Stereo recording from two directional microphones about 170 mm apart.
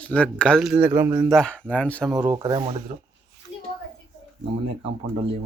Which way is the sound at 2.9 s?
40° right (ahead or behind).